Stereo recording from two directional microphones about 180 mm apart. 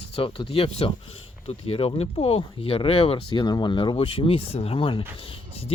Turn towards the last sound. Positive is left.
turn(degrees=35)  # may be behind; listen again after turning